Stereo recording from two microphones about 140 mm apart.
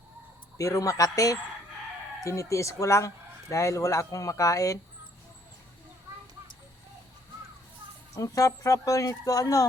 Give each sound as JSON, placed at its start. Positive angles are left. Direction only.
{"t": 0.6, "sound": "speech", "side_deg": 25}
{"t": 8.1, "sound": "speech", "side_deg": 25}